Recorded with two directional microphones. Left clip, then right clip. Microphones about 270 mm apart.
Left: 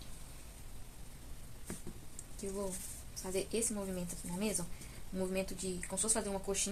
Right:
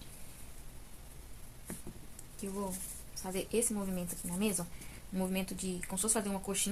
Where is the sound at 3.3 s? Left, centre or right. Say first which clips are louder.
Right 2 dB; right.